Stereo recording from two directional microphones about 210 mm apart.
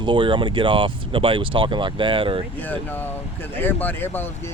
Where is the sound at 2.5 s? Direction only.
10° left (ahead or behind).